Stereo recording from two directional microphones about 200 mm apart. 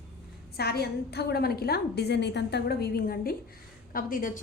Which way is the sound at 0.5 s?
50° left (ahead or behind).